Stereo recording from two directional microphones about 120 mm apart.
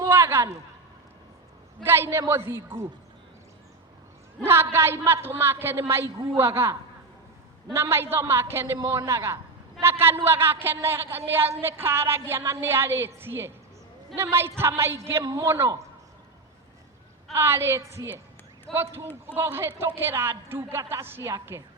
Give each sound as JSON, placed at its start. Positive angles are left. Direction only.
{"t": 0.0, "sound": "a sound", "side_deg": -20}
{"t": 1.8, "sound": "a woman's voice", "side_deg": -20}
{"t": 4.4, "sound": "a woman's voice", "side_deg": -20}
{"t": 17.3, "sound": "a woman's voice", "side_deg": -20}